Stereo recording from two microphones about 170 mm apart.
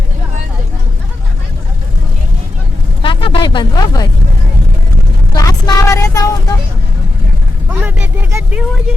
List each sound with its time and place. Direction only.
3.0 s a sound: 30° left (ahead or behind)
5.3 s vehicle: 25° left (ahead or behind)
7.7 s vehicle: 10° right (ahead or behind)